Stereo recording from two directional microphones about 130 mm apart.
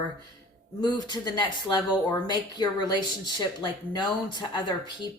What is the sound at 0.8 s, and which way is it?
Speech, 30° left (ahead or behind).